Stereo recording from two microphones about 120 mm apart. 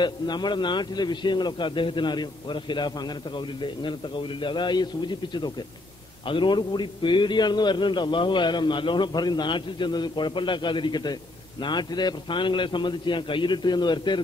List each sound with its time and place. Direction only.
0.0 s a man's voice: 40° left (ahead or behind)